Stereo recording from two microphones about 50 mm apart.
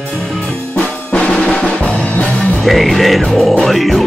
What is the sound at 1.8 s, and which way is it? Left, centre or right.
Music, left.